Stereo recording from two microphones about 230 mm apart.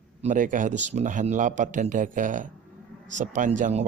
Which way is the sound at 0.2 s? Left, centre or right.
Right.